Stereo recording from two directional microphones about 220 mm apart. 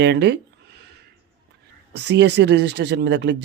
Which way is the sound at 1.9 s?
50° right (ahead or behind).